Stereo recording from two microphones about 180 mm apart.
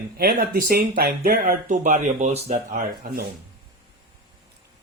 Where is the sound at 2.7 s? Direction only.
50° right (ahead or behind).